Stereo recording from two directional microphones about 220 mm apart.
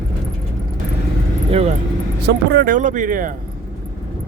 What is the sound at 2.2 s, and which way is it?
Speech, 45° right (ahead or behind).